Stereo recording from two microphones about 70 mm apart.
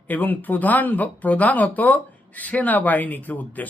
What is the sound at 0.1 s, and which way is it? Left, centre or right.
Speech, left.